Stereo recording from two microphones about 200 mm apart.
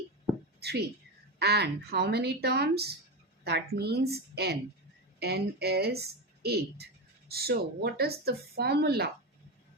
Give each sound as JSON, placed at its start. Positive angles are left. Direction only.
{"t": 0.6, "sound": "speech", "side_deg": -55}
{"t": 5.2, "sound": "a woman's voice", "side_deg": -55}